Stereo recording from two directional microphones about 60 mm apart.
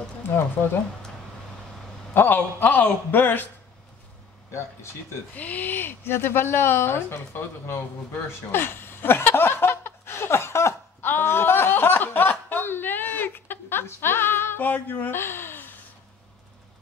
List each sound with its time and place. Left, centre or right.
2.1 s a man's voice: left
5.3 s speech: left
11.1 s chuckle: left